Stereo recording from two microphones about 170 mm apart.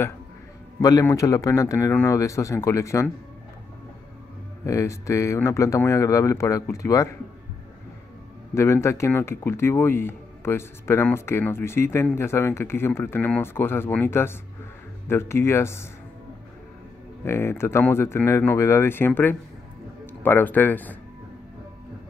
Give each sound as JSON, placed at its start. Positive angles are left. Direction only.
{"t": 0.7, "sound": "speech", "side_deg": 20}
{"t": 4.6, "sound": "speech", "side_deg": 15}
{"t": 8.5, "sound": "speech", "side_deg": 15}
{"t": 17.2, "sound": "speech", "side_deg": 15}